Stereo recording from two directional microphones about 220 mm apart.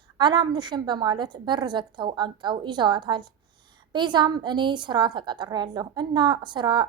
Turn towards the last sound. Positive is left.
turn(degrees=-20)  # may be behind; listen again after turning